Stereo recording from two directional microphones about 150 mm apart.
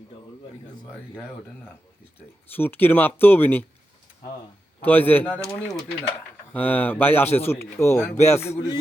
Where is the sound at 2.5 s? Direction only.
15° left (ahead or behind).